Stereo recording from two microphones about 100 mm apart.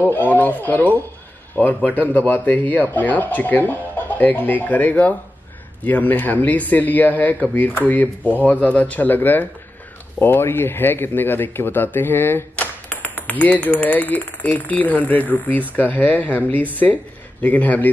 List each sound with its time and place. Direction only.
0.3 s a man's voice: 15° left (ahead or behind)